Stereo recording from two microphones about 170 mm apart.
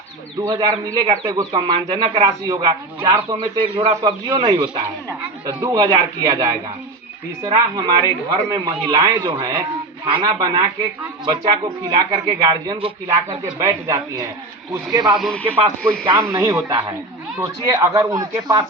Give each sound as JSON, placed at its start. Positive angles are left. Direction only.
{"t": 0.4, "sound": "speech", "side_deg": -20}
{"t": 15.0, "sound": "speech", "side_deg": 0}
{"t": 16.0, "sound": "a man's voice", "side_deg": -15}